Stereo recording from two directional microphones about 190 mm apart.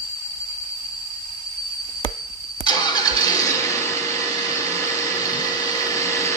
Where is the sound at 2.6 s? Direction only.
20° left (ahead or behind).